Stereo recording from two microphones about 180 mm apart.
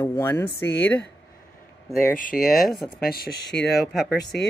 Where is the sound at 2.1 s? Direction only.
50° left (ahead or behind).